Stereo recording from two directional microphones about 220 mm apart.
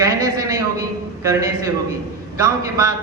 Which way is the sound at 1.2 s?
15° right (ahead or behind).